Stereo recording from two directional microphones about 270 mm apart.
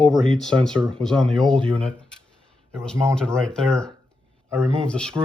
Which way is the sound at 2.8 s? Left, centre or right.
Centre.